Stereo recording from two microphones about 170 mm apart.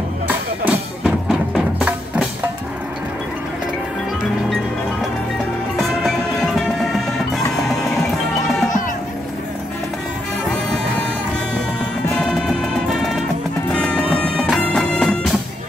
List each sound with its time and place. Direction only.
0.7 s music: 5° right (ahead or behind)
5.8 s music: centre (ahead or behind)
12.1 s music: centre (ahead or behind)